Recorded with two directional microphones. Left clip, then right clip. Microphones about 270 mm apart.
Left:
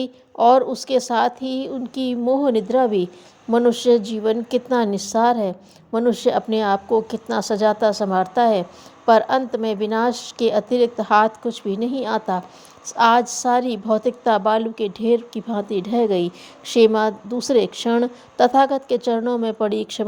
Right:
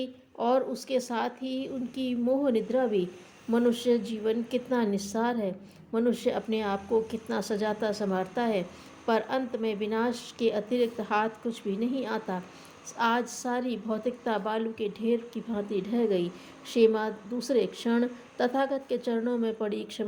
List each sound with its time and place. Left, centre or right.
0.0 s a woman's voice: left